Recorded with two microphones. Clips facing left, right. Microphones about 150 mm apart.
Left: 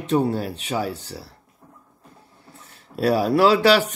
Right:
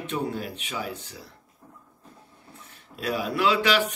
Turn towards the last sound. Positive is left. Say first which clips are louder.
# left 7 dB
turn(degrees=35)  # may be behind; listen again after turning